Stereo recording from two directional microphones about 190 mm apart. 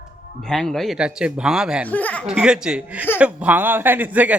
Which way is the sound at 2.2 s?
5° right (ahead or behind).